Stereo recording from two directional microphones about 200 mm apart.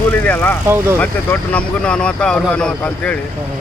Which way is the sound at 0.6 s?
10° right (ahead or behind).